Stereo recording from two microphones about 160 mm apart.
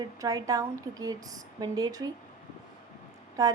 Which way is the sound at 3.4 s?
20° right (ahead or behind).